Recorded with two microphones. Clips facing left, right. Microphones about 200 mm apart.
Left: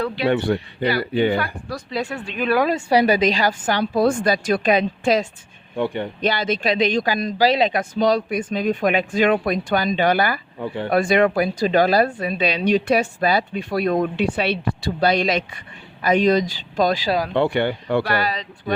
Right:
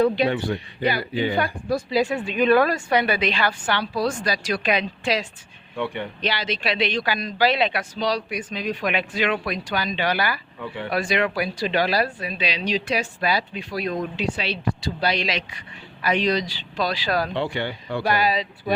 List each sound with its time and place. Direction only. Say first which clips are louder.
0.3 s speech: left 5 dB; 65° left (ahead or behind)
2.2 s speech: right 1 dB; centre (ahead or behind)
2.6 s a woman's voice: left 5 dB; 30° left (ahead or behind); by 5.3 s 50° left (ahead or behind)
5.7 s a woman's voice: left 5 dB; 35° left (ahead or behind)
17.3 s speech: left 7 dB; 55° left (ahead or behind)
18.0 s speech: right 1 dB; 15° right (ahead or behind)